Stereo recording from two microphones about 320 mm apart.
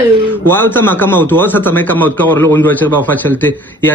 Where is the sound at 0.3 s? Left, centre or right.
Centre.